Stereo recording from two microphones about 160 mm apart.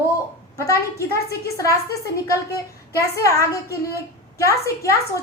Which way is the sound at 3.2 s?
20° left (ahead or behind).